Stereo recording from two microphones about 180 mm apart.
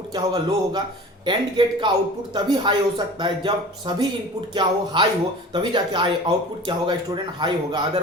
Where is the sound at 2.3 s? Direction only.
25° right (ahead or behind).